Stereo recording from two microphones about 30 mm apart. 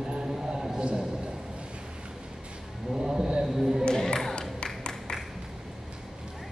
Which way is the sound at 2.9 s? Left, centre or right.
Centre.